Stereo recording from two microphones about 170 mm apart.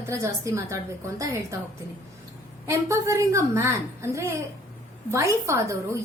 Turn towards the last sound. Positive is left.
turn(degrees=-15)  # may be behind; listen again after turning